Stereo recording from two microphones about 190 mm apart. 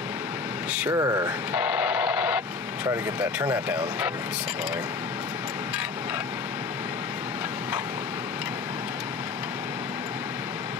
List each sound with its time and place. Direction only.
0.7 s speech: 15° right (ahead or behind)
1.5 s radio: 5° right (ahead or behind)